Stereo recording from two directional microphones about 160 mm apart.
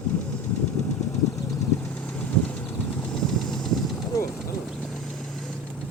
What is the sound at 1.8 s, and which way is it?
Vehicle, 5° left (ahead or behind).